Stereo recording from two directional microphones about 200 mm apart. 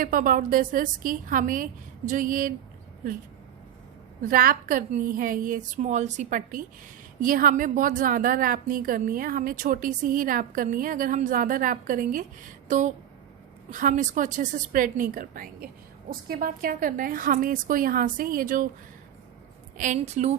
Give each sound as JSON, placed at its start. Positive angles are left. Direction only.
{"t": 0.0, "sound": "a woman's voice", "side_deg": -45}
{"t": 4.2, "sound": "a woman's voice", "side_deg": -45}
{"t": 19.7, "sound": "a woman's voice", "side_deg": -40}